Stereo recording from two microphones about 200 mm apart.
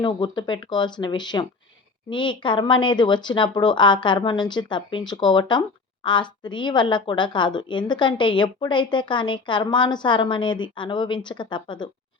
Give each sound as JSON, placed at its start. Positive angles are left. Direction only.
{"t": 0.0, "sound": "speech", "side_deg": 20}